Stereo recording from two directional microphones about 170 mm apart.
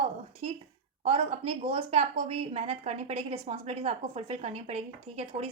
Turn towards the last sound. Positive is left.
turn(degrees=-35)  # may be behind; listen again after turning